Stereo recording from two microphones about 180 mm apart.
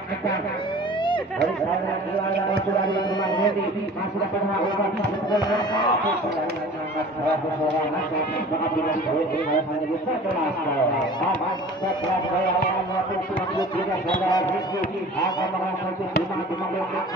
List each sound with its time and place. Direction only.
2.5 s speech: 25° left (ahead or behind)
5.3 s speech: 25° left (ahead or behind)